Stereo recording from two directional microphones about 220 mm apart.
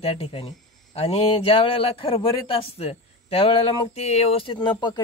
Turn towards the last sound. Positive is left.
turn(degrees=20)  # may be behind; listen again after turning